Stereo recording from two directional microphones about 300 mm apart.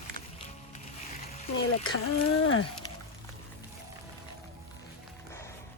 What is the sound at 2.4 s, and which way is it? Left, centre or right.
Speech, left.